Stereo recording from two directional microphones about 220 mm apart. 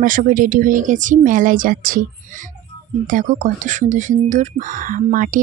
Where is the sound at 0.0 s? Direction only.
40° right (ahead or behind).